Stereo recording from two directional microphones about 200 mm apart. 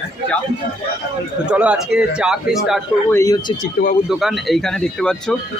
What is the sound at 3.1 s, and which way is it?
Speech, 15° left (ahead or behind).